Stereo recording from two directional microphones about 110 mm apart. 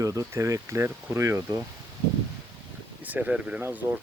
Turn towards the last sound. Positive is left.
turn(degrees=-15)  # may be behind; listen again after turning